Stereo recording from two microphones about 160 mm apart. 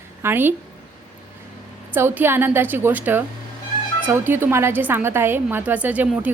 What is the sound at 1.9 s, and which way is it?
A woman's voice, 15° right (ahead or behind).